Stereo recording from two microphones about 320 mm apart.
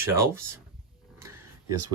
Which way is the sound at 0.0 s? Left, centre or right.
Centre.